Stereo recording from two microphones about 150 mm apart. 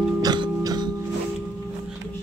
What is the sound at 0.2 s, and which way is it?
Music, 25° right (ahead or behind).